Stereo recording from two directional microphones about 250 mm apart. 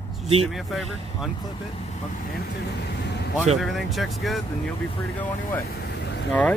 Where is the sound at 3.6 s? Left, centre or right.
Centre.